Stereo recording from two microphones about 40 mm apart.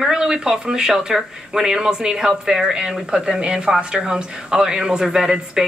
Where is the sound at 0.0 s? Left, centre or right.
Centre.